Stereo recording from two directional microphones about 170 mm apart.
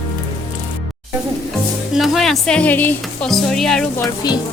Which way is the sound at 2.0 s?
Centre (ahead or behind).